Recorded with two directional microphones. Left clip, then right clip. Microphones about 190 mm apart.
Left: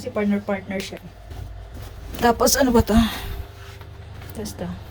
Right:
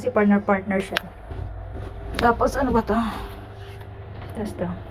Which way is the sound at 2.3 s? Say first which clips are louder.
Left 3 dB; 55° left (ahead or behind).